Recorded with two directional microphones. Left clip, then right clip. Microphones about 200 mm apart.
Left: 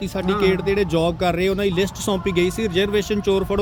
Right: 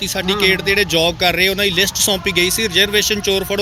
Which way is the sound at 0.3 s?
50° left (ahead or behind).